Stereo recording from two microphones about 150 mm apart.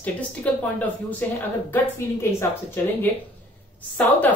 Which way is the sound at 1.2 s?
10° left (ahead or behind).